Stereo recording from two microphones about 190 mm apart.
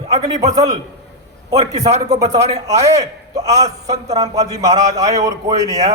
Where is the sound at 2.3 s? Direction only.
35° right (ahead or behind).